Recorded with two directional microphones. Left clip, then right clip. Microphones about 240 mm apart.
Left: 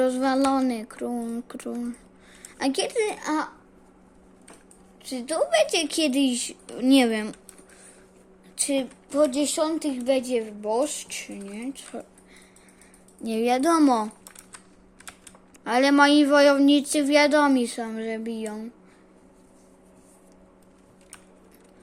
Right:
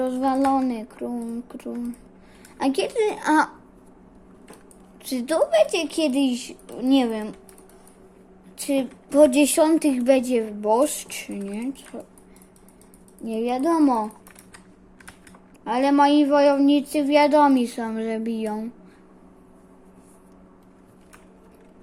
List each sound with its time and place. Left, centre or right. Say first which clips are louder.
0.0 s child singing: even; centre
0.5 s a woman's voice: right 2 dB; centre
5.0 s a woman's voice: right 4 dB; centre
5.5 s a woman's voice: right 2 dB; centre
8.5 s a woman's voice: right 2 dB; centre
9.0 s a woman's voice: right 7 dB; centre
13.2 s a woman's voice: left 1 dB; centre
15.6 s a woman's voice: even; centre